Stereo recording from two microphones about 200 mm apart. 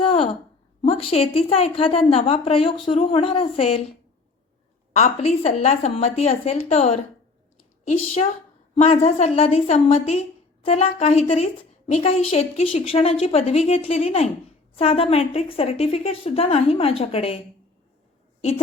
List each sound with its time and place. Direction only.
0.0 s a sound: 30° left (ahead or behind)
0.8 s a woman's voice: 30° left (ahead or behind)
4.9 s a woman's voice: 35° left (ahead or behind)